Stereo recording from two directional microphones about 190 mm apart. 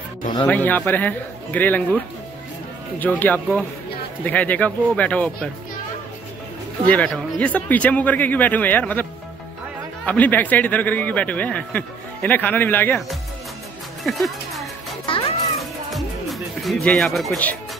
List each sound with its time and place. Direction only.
0.5 s speech: 10° left (ahead or behind)
3.0 s speech: 10° left (ahead or behind)
6.9 s speech: 10° left (ahead or behind)
10.0 s speech: 10° left (ahead or behind)
14.0 s music: centre (ahead or behind)
15.0 s music: 30° left (ahead or behind)
15.9 s music: centre (ahead or behind)